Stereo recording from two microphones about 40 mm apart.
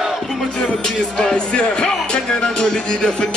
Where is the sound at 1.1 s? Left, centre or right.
Left.